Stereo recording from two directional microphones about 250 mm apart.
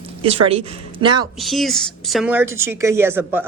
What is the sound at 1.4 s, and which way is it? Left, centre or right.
A woman's voice, centre.